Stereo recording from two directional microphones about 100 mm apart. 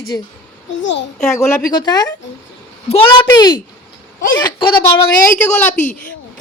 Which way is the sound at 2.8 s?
90° left.